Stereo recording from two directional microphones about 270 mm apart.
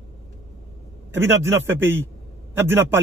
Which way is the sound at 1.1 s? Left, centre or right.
Centre.